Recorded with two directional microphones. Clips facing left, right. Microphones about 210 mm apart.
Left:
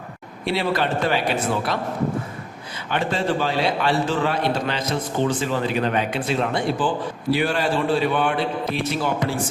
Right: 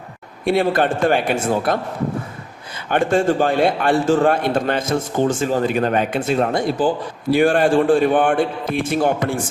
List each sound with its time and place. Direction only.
0.4 s a man's voice: 50° right (ahead or behind)
2.9 s a man's voice: 50° right (ahead or behind)